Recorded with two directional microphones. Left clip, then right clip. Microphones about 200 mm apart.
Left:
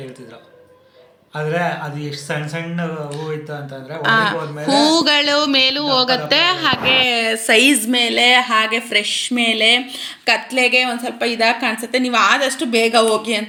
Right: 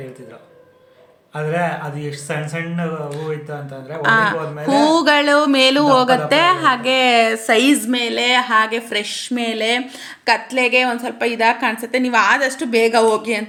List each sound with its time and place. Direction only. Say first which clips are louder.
1.4 s speech: even; 5° right (ahead or behind)